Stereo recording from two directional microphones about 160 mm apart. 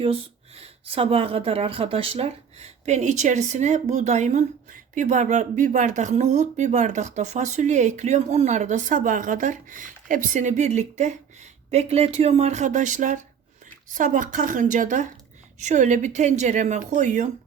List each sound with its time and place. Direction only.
0.0 s a woman's voice: 35° right (ahead or behind)